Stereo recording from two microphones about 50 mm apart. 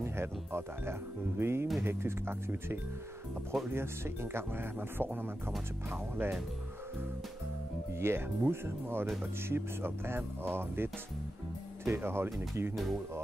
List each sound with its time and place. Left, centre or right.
0.0 s speech: right
8.0 s speech: right